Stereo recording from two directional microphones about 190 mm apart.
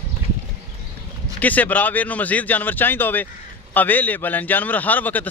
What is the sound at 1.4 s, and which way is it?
A man's voice, 10° left (ahead or behind).